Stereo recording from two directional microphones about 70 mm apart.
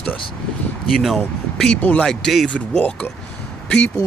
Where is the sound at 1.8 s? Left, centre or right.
Left.